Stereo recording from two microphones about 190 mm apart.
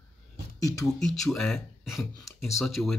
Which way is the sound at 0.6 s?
20° left (ahead or behind).